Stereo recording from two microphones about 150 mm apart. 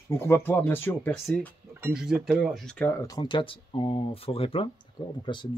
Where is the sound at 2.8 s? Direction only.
20° left (ahead or behind).